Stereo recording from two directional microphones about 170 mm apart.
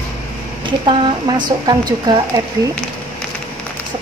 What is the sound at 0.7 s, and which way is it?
Speech, 30° right (ahead or behind).